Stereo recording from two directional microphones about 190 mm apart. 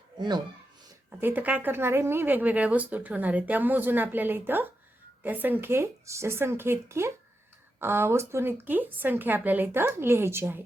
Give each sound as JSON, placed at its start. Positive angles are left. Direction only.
{"t": 0.2, "sound": "speech", "side_deg": -20}
{"t": 1.2, "sound": "speech", "side_deg": -10}